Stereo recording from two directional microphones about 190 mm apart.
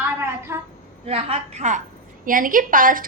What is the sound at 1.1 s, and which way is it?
A woman's voice, 30° right (ahead or behind).